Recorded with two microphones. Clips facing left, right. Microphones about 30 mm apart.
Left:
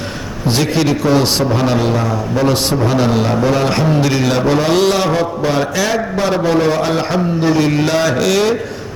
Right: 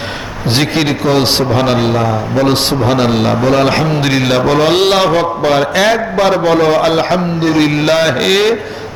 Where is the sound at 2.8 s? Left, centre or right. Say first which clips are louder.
Right 3 dB; right.